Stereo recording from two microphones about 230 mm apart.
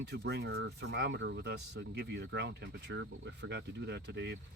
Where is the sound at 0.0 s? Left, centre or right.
Right.